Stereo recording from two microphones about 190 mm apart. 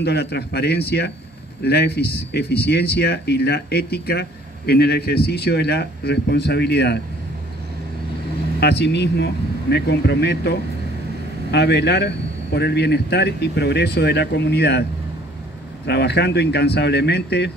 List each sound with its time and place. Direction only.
0.0 s speech: 60° left (ahead or behind)
8.5 s speech: 60° left (ahead or behind)